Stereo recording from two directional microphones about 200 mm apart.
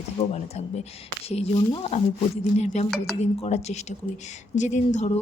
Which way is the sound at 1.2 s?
30° left (ahead or behind).